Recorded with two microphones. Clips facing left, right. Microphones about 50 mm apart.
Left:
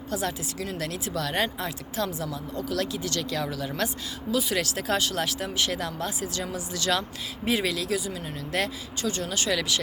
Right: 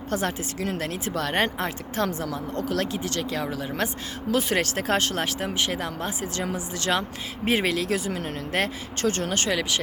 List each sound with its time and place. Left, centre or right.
0.1 s speech: right
4.3 s speech: right